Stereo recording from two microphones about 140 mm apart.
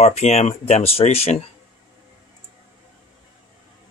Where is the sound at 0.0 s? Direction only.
50° left (ahead or behind).